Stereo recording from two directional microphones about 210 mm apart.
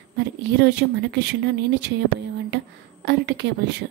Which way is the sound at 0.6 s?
55° right (ahead or behind).